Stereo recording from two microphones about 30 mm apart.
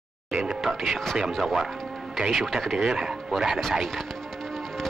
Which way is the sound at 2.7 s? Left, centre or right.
Right.